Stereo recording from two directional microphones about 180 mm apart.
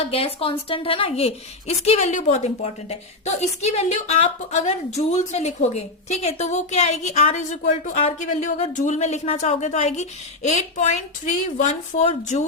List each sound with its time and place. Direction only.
0.0 s a woman's voice: 30° left (ahead or behind)